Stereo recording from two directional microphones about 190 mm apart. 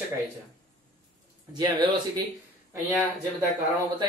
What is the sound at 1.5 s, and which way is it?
Speech, 20° right (ahead or behind).